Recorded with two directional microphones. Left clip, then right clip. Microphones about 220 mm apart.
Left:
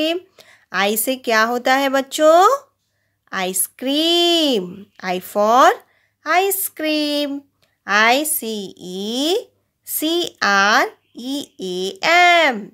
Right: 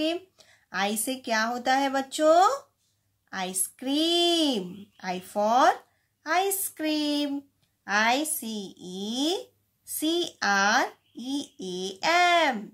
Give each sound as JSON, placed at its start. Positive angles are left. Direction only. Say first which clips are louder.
{"t": 0.0, "sound": "a child's voice", "louder": "left 8 dB", "side_deg": 45}